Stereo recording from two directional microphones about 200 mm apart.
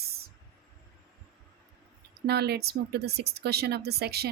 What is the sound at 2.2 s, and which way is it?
A woman's voice, 55° right (ahead or behind).